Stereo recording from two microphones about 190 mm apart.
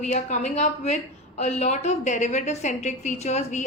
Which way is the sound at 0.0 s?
40° left (ahead or behind).